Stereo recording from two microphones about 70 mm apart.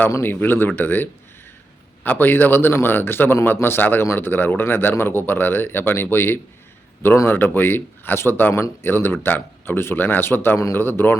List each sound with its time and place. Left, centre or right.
0.2 s a man's voice: left
2.0 s a man's voice: left